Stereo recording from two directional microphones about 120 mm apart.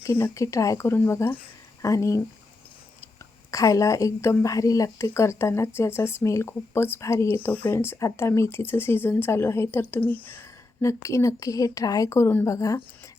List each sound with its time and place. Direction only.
0.0 s a woman's voice: 20° left (ahead or behind)
3.5 s a woman's voice: 30° left (ahead or behind)